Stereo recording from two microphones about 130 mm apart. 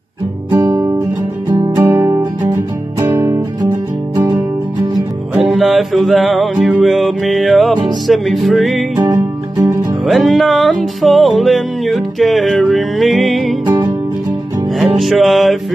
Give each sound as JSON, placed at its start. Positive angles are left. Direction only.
{"t": 0.5, "sound": "guitar", "side_deg": -25}
{"t": 1.9, "sound": "music", "side_deg": -25}
{"t": 5.4, "sound": "music", "side_deg": 0}
{"t": 10.0, "sound": "music", "side_deg": 0}
{"t": 14.8, "sound": "music", "side_deg": 0}